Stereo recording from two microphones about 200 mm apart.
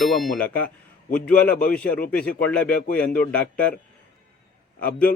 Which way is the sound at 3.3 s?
5° left (ahead or behind).